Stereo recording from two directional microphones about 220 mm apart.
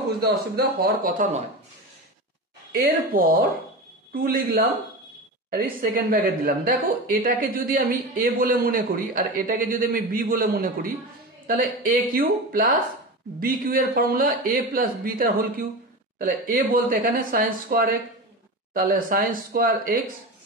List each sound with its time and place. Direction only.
0.2 s speech: 45° right (ahead or behind)
3.1 s a woman's voice: 40° right (ahead or behind)